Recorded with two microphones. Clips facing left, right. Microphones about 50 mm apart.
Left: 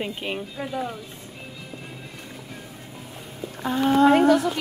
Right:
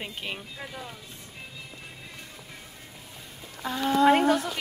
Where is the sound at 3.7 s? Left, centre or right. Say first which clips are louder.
Left 4 dB; left.